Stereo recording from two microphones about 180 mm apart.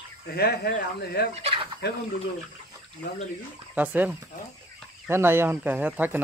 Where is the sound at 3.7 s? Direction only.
10° right (ahead or behind).